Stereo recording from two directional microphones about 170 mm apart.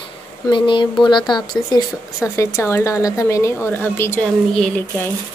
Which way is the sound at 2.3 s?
15° left (ahead or behind).